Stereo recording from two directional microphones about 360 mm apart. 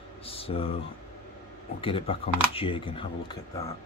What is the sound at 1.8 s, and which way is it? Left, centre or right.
Speech, centre.